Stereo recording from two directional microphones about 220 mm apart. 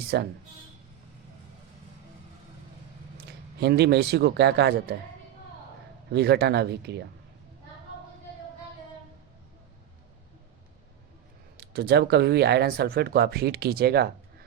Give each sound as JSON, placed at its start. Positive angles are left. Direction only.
{"t": 0.1, "sound": "speech", "side_deg": -50}
{"t": 3.6, "sound": "speech", "side_deg": -50}
{"t": 6.1, "sound": "speech", "side_deg": -50}
{"t": 11.5, "sound": "speech", "side_deg": -45}